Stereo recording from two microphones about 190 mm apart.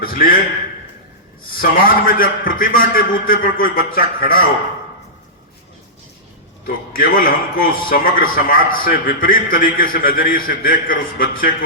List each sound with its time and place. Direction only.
0.0 s a man's voice: 50° left (ahead or behind)
1.5 s a man's voice: 50° left (ahead or behind)
6.7 s a man's voice: 50° left (ahead or behind)